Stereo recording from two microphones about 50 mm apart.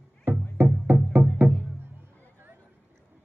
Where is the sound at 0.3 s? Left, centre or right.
Right.